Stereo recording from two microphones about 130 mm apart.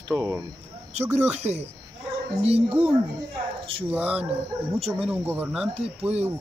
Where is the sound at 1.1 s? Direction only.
60° right (ahead or behind).